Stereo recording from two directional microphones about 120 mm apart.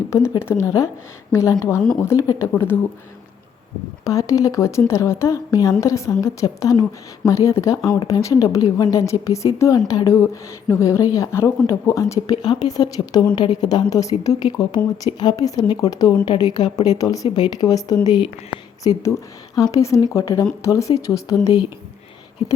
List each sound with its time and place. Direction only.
0.1 s a woman's voice: 20° left (ahead or behind)
4.0 s a woman's voice: 25° left (ahead or behind)
12.4 s a woman's voice: 35° left (ahead or behind)